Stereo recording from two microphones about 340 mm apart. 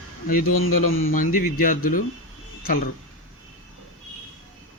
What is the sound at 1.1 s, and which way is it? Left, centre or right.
Speech, left.